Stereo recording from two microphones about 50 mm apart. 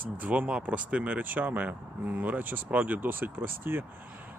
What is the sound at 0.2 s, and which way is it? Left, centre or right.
Speech, right.